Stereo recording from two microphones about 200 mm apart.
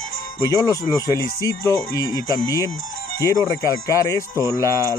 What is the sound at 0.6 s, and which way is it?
Speech, 15° left (ahead or behind).